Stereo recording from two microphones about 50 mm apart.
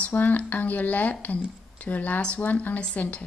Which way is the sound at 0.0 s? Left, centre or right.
Left.